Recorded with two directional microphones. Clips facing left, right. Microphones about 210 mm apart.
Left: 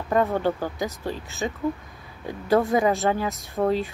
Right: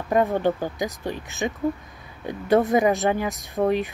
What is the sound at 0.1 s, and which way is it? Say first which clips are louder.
Speech: right 2 dB; 15° right (ahead or behind).